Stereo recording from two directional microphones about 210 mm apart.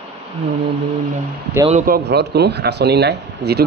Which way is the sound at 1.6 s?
40° right (ahead or behind).